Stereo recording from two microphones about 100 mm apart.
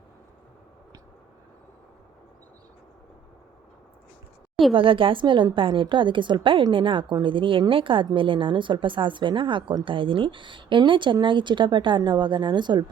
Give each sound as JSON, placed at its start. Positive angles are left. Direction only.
{"t": 4.7, "sound": "a woman's voice", "side_deg": -60}